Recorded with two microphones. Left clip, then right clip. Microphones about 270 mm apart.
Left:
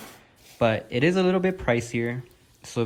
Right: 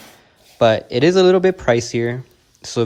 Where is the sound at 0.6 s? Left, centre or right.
Centre.